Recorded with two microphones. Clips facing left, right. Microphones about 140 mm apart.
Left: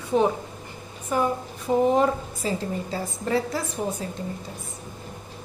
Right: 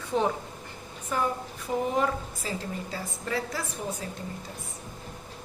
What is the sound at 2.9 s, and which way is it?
Speech, 25° left (ahead or behind).